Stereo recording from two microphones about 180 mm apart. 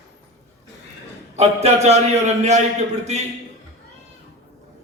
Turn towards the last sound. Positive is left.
turn(degrees=-40)  # may be behind; listen again after turning